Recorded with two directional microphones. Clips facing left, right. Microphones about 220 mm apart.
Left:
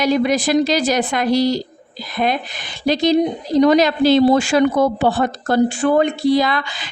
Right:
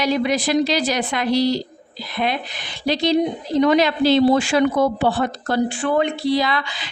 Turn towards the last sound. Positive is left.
turn(degrees=50)  # may be behind; listen again after turning